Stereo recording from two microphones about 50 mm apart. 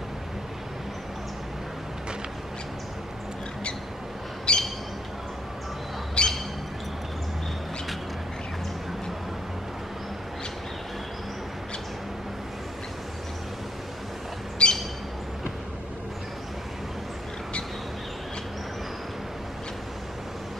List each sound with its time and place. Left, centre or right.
4.5 s squawk: centre
6.2 s squawk: centre
14.6 s squawk: centre